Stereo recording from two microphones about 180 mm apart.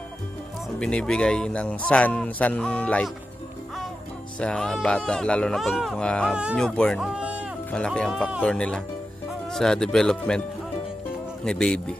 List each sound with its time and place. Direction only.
0.7 s speech: 5° left (ahead or behind)
4.4 s speech: 5° left (ahead or behind)
7.7 s speech: 5° left (ahead or behind)
11.4 s speech: 5° left (ahead or behind)